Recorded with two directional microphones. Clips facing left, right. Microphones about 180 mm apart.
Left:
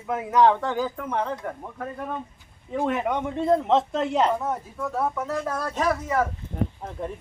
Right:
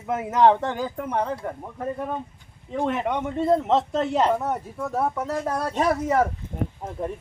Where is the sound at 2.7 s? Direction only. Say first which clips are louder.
Even; 5° left (ahead or behind).